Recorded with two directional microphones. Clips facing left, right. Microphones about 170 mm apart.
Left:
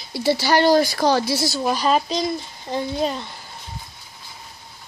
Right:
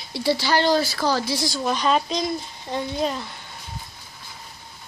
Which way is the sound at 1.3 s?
10° left (ahead or behind).